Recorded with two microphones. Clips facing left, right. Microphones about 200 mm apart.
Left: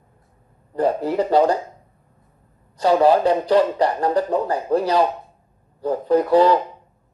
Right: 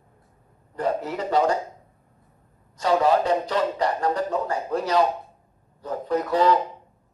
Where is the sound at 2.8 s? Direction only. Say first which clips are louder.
Left 5 dB; 35° left (ahead or behind).